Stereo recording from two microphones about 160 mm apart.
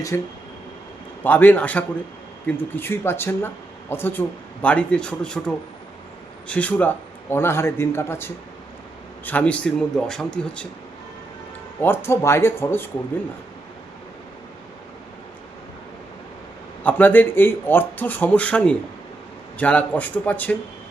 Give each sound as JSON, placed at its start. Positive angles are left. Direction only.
{"t": 0.1, "sound": "speech", "side_deg": 15}
{"t": 11.8, "sound": "speech", "side_deg": 15}
{"t": 16.8, "sound": "speech", "side_deg": 10}